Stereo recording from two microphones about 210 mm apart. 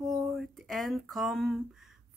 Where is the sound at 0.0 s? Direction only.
Centre (ahead or behind).